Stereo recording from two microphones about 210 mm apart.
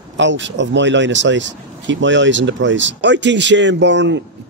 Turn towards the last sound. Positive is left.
turn(degrees=-60)  # may be behind; listen again after turning